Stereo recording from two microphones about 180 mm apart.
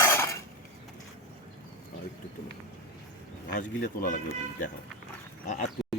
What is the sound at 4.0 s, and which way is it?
Speech, 50° left (ahead or behind).